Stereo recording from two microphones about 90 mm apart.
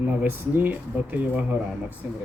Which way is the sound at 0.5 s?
20° right (ahead or behind).